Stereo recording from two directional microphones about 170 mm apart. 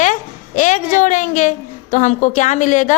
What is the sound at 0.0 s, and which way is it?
A woman's voice, 50° left (ahead or behind).